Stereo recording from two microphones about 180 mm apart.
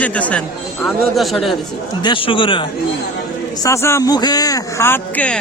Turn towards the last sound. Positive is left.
turn(degrees=5)  # may be behind; listen again after turning